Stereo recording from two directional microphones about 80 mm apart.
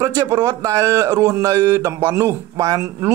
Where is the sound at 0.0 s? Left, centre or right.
Right.